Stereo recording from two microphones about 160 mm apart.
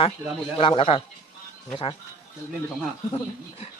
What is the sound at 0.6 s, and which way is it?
A woman's voice, 35° left (ahead or behind).